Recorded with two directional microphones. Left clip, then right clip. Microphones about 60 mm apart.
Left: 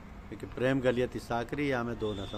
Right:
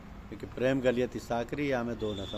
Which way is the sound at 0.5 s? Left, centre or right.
Left.